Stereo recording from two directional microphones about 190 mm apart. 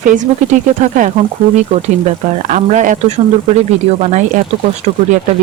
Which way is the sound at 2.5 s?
40° right (ahead or behind).